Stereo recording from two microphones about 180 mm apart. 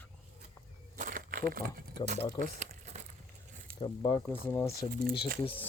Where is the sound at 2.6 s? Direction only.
40° right (ahead or behind).